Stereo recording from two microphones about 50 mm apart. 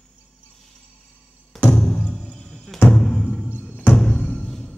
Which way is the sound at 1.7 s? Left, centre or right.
Centre.